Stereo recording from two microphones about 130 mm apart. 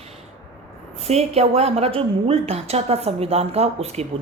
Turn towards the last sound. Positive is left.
turn(degrees=-55)  # may be behind; listen again after turning